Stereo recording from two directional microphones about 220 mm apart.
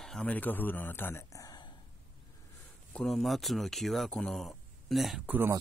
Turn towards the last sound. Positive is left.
turn(degrees=-10)  # may be behind; listen again after turning